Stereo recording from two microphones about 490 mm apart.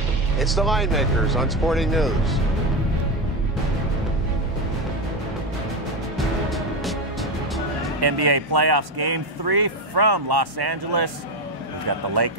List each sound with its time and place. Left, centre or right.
0.4 s speech: centre
6.1 s music: centre
8.0 s speech: right
12.2 s speech: right